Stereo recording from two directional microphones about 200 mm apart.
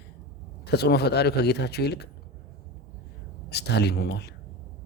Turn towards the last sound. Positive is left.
turn(degrees=55)  # may be behind; listen again after turning